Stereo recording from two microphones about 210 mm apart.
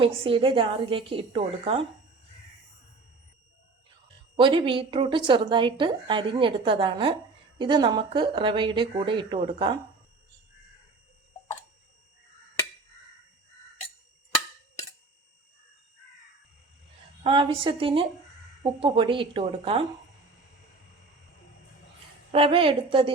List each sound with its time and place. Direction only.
0.0 s a woman's voice: 25° right (ahead or behind)
4.4 s a woman's voice: 25° right (ahead or behind)
17.2 s a woman's voice: 25° right (ahead or behind)
22.3 s a woman's voice: 25° right (ahead or behind)